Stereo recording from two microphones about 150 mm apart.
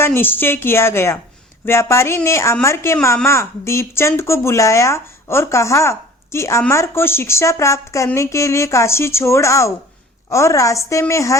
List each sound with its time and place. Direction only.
0.0 s a woman's voice: 15° left (ahead or behind)